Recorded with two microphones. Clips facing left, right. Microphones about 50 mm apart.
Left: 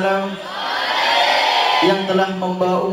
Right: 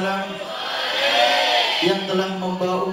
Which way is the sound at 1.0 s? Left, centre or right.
Left.